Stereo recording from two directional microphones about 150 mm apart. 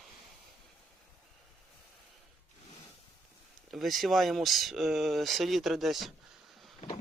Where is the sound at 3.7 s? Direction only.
Centre (ahead or behind).